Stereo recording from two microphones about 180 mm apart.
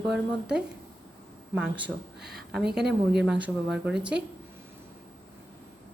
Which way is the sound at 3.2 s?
5° right (ahead or behind).